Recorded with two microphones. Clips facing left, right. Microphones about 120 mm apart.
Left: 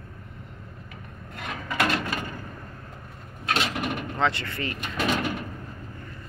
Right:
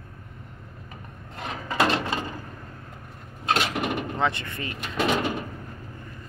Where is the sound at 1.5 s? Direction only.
30° right (ahead or behind).